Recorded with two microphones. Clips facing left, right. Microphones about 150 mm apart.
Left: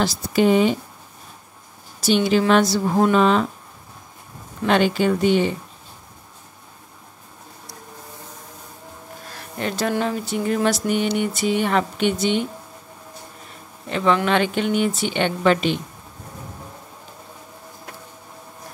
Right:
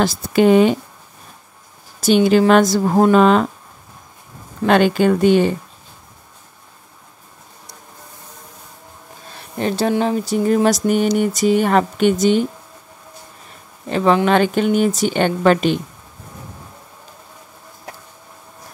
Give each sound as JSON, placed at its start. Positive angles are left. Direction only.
{"t": 0.0, "sound": "speech", "side_deg": -55}
{"t": 2.0, "sound": "speech", "side_deg": -50}
{"t": 4.6, "sound": "speech", "side_deg": -50}
{"t": 9.6, "sound": "speech", "side_deg": -35}
{"t": 13.8, "sound": "speech", "side_deg": -35}